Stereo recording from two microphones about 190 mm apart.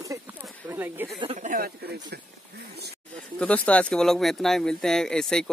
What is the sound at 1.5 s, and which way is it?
Speech, 55° right (ahead or behind).